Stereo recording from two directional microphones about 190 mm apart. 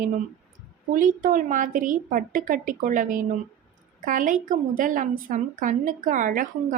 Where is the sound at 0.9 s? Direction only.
45° right (ahead or behind).